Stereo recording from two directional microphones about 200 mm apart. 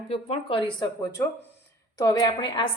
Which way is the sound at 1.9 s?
20° left (ahead or behind).